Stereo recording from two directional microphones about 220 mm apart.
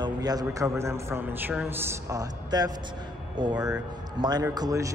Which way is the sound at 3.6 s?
5° right (ahead or behind).